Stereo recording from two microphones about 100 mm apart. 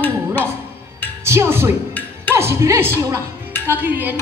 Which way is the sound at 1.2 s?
25° right (ahead or behind).